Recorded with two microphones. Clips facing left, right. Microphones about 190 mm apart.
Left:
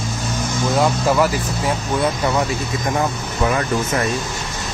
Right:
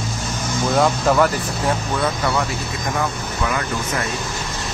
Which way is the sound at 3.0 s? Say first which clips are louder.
Left 2 dB; 30° left (ahead or behind).